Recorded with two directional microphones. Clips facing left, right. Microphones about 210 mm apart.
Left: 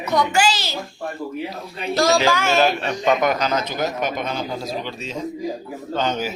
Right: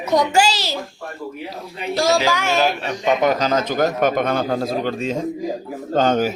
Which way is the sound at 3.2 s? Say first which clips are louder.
Right 3 dB; 35° right (ahead or behind).